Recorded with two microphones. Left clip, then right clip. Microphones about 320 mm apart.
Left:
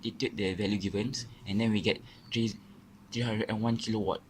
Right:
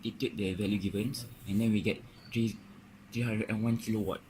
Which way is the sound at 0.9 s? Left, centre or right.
Left.